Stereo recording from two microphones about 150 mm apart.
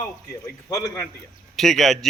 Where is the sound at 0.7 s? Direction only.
20° left (ahead or behind).